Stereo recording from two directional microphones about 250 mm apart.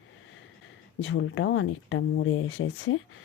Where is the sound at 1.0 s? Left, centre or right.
Left.